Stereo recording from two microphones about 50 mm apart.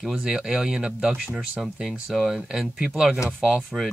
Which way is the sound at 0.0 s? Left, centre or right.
Centre.